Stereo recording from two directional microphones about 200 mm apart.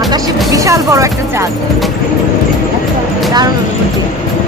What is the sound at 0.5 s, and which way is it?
Speech, 15° right (ahead or behind).